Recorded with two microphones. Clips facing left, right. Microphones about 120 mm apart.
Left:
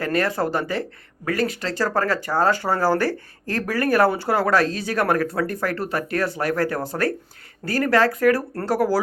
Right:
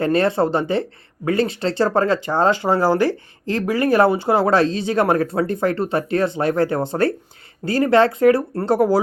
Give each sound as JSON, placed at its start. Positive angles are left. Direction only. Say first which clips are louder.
{"t": 0.0, "sound": "speech", "louder": "right 5 dB", "side_deg": -25}